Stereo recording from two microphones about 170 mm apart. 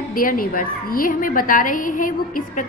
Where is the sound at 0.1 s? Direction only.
55° left (ahead or behind).